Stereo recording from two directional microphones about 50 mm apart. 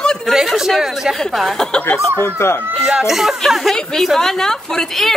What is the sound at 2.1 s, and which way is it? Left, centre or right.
Speech, left.